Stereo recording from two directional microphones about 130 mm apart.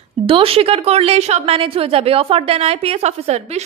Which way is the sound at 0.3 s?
45° right (ahead or behind).